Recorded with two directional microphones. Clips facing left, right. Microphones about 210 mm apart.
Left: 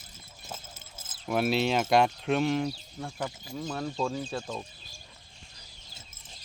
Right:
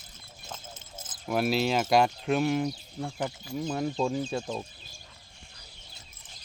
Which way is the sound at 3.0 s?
20° right (ahead or behind).